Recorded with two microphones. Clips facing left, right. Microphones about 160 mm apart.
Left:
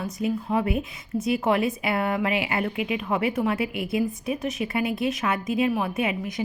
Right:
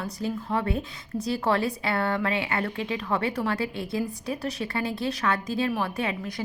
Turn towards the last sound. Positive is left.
turn(degrees=20)  # may be behind; listen again after turning